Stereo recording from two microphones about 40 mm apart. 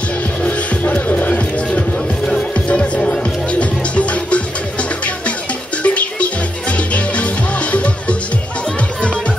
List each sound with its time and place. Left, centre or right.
0.4 s music: left
1.7 s music: left